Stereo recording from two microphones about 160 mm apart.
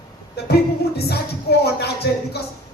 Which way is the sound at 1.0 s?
90° left.